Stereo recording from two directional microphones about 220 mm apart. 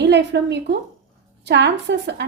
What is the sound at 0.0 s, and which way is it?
A woman's voice, 50° right (ahead or behind).